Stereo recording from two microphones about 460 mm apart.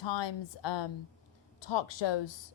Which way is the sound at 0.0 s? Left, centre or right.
Left.